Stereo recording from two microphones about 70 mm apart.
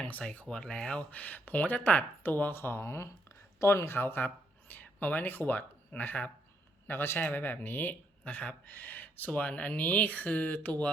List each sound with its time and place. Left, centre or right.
0.0 s speech: centre